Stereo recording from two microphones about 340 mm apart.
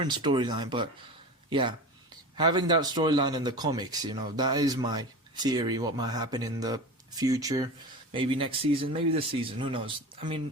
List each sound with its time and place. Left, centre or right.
0.2 s speech: centre